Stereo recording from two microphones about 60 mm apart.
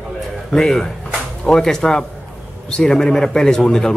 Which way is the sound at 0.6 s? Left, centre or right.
Centre.